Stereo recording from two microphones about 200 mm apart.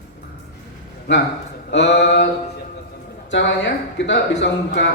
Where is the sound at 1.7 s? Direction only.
60° left (ahead or behind).